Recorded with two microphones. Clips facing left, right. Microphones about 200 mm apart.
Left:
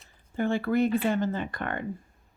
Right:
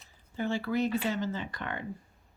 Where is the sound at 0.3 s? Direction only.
55° left (ahead or behind).